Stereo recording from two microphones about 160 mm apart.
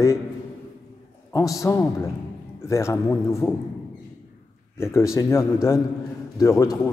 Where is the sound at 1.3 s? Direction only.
20° left (ahead or behind).